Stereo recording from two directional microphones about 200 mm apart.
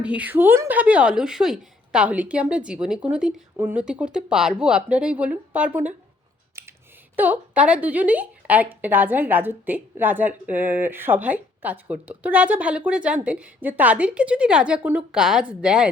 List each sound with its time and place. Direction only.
0.0 s speech: 5° right (ahead or behind)
6.6 s typing: 10° right (ahead or behind)
7.2 s speech: 5° right (ahead or behind)